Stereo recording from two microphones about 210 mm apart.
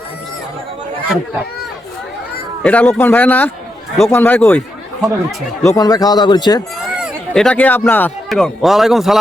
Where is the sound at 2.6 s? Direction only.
5° left (ahead or behind).